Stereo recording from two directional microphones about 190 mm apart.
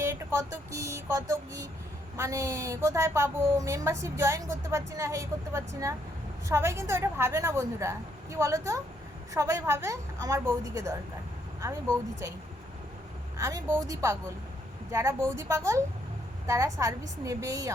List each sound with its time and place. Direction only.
0.0 s speech: 15° right (ahead or behind)
13.3 s speech: 15° right (ahead or behind)